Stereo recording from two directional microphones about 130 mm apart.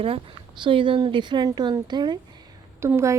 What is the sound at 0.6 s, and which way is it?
A woman's voice, 40° right (ahead or behind).